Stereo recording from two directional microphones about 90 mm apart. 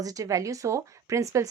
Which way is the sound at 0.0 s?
40° right (ahead or behind).